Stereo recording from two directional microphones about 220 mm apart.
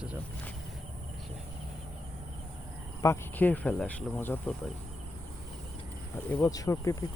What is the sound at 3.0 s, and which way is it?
Speech, 10° left (ahead or behind).